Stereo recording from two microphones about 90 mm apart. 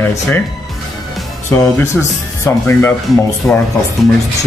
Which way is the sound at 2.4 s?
30° left (ahead or behind).